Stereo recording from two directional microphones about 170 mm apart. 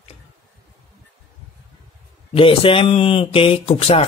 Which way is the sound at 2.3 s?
30° left (ahead or behind).